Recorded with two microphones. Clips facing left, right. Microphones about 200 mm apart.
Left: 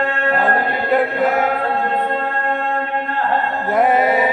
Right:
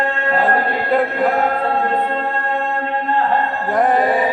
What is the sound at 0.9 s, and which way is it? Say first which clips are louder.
Chant: even; 5° left (ahead or behind).